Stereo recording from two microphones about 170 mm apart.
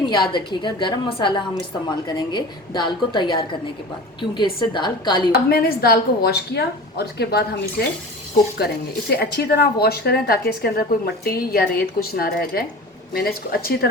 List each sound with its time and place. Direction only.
0.0 s a woman's voice: 25° left (ahead or behind)
5.3 s a woman's voice: 65° left (ahead or behind)